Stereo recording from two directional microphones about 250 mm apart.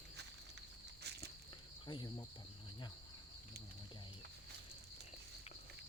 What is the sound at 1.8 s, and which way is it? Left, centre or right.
Speech, centre.